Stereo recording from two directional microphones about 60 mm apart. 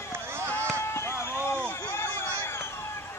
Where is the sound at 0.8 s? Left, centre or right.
Left.